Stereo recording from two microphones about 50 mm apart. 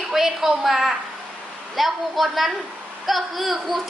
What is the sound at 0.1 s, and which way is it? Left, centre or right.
A woman's voice, centre.